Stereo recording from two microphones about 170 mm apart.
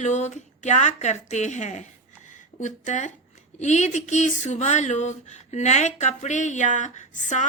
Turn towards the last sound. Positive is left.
turn(degrees=45)  # may be behind; listen again after turning